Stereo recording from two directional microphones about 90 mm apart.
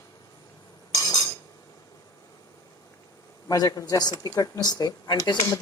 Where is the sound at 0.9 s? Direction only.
50° left (ahead or behind).